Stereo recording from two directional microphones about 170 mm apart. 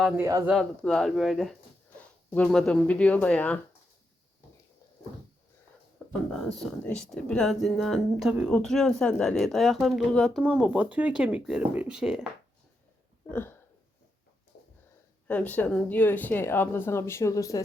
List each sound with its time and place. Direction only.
0.2 s speech: 20° right (ahead or behind)
0.4 s speech: centre (ahead or behind)
6.0 s a sound: 5° right (ahead or behind)
6.8 s speech: 5° left (ahead or behind)
13.2 s a sound: 10° left (ahead or behind)
15.3 s speech: 10° left (ahead or behind)